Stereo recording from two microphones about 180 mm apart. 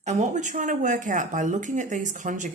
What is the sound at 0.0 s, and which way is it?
A woman's voice, 40° right (ahead or behind).